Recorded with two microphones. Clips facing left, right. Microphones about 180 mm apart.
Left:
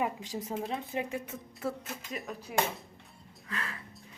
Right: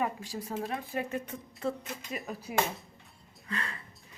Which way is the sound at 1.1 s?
5° left (ahead or behind).